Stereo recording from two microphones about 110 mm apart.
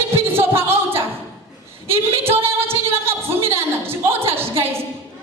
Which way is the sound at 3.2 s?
60° right (ahead or behind).